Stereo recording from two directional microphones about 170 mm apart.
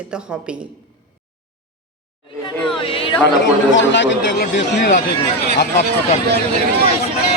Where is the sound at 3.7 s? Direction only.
90° left.